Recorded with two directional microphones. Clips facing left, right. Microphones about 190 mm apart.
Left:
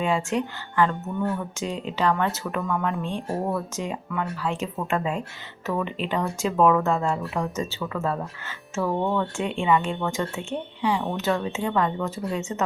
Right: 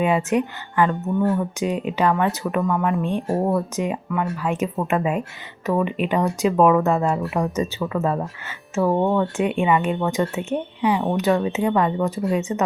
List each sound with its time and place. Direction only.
0.0 s speech: 20° right (ahead or behind)
2.5 s speech: centre (ahead or behind)
3.0 s speech: 15° right (ahead or behind)